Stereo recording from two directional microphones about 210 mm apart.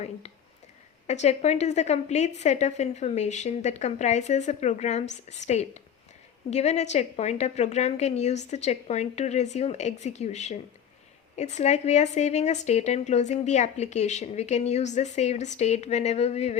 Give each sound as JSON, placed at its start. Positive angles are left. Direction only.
{"t": 1.0, "sound": "speech", "side_deg": 35}